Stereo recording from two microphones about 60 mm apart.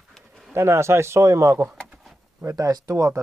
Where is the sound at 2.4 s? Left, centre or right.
Right.